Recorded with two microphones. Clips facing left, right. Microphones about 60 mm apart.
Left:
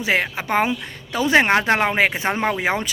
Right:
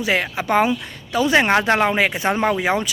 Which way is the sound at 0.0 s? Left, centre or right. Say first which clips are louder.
Even; left.